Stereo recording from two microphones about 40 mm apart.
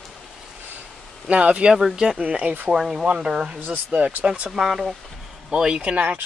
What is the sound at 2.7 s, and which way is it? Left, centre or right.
Speech, centre.